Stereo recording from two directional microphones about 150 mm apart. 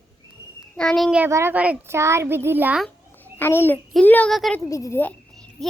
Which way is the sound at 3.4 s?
15° left (ahead or behind).